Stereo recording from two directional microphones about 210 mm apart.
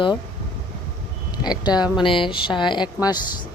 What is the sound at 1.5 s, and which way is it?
Speech, 20° left (ahead or behind).